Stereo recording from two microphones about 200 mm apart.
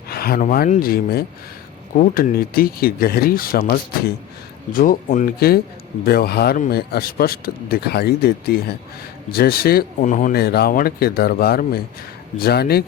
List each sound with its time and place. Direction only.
0.1 s speech: 50° left (ahead or behind)